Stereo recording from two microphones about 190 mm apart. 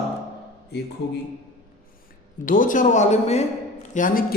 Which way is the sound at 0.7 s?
60° left (ahead or behind).